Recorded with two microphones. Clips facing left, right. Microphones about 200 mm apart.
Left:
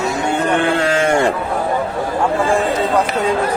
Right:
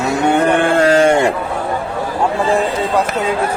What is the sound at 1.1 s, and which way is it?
Speech, 15° right (ahead or behind).